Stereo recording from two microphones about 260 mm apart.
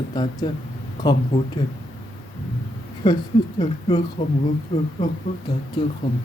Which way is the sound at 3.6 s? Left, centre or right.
Centre.